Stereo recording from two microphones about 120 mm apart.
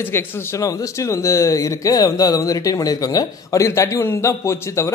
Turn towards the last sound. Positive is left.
turn(degrees=25)  # may be behind; listen again after turning